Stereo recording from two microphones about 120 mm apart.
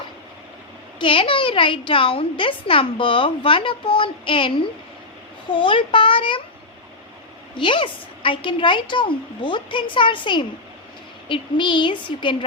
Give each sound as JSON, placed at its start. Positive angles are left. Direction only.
{"t": 0.9, "sound": "a woman's voice", "side_deg": 45}
{"t": 7.5, "sound": "a woman's voice", "side_deg": 45}